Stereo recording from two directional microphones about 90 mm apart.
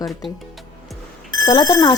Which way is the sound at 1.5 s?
50° left (ahead or behind).